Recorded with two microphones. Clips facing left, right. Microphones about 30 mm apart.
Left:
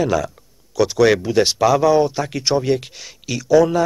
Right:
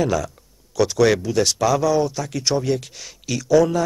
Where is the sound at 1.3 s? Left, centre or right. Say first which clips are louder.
Left 4 dB; left.